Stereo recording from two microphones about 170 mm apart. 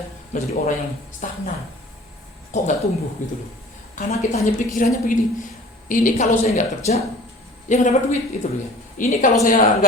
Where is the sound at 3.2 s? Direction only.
50° left (ahead or behind).